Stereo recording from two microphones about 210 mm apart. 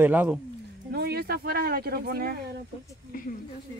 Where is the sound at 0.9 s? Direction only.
50° right (ahead or behind).